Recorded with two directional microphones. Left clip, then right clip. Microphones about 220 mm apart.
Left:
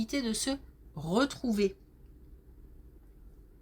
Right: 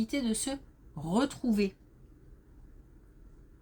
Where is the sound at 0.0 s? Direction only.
35° left (ahead or behind).